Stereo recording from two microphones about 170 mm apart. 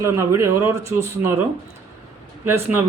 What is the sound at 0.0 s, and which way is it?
Speech, 15° right (ahead or behind).